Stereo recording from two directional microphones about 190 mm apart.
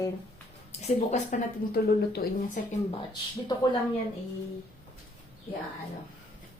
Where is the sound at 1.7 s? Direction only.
55° left (ahead or behind).